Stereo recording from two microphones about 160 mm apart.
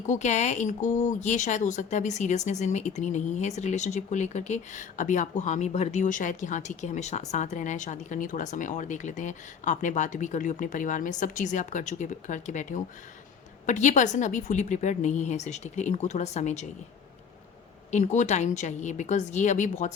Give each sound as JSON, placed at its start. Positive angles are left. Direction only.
{"t": 0.0, "sound": "speech", "side_deg": 50}
{"t": 17.9, "sound": "speech", "side_deg": 50}